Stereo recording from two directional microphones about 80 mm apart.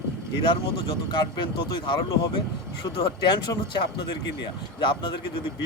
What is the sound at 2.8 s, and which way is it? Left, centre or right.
Speech, left.